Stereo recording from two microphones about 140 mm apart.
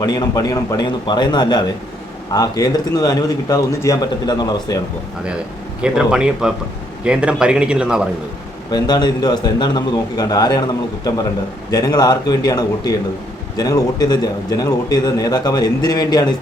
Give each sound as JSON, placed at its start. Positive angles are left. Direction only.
{"t": 0.0, "sound": "a man's voice", "side_deg": 25}
{"t": 5.8, "sound": "speech", "side_deg": -5}
{"t": 8.7, "sound": "a man's voice", "side_deg": 30}